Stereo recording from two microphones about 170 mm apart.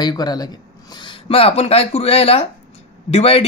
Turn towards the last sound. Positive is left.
turn(degrees=35)  # may be behind; listen again after turning